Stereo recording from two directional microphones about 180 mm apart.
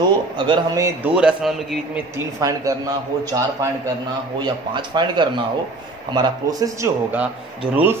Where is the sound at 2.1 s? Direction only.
20° right (ahead or behind).